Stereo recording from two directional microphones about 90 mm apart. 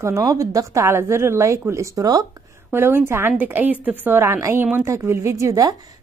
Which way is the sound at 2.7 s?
25° right (ahead or behind).